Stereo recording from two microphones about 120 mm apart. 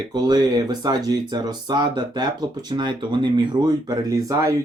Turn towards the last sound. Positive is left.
turn(degrees=-30)  # may be behind; listen again after turning